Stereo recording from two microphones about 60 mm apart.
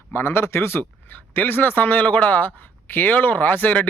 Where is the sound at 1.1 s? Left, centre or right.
Left.